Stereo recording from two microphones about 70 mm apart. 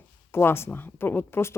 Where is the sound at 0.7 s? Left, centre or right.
Left.